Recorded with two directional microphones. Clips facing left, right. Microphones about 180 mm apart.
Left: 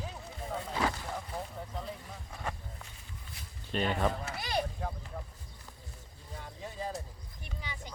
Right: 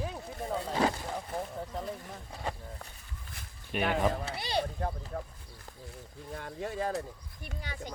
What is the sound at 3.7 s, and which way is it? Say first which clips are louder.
Speech: right 1 dB; 10° right (ahead or behind).